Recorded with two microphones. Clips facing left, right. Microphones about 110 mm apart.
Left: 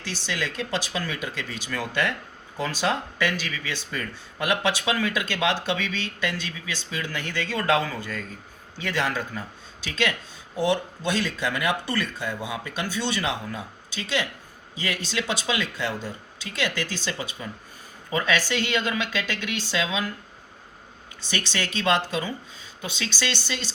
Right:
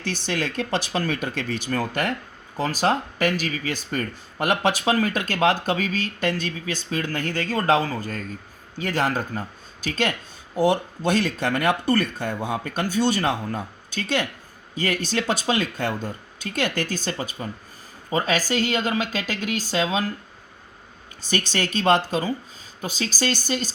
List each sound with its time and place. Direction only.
0.0 s a woman's voice: 50° right (ahead or behind)
21.2 s a woman's voice: 45° right (ahead or behind)